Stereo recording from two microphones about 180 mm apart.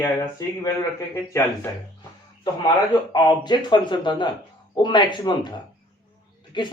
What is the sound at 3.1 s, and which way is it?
Speech, 25° left (ahead or behind).